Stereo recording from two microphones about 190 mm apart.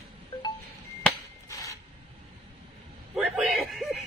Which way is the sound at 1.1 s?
5° left (ahead or behind).